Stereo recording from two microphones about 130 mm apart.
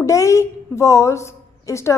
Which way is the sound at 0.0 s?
25° left (ahead or behind).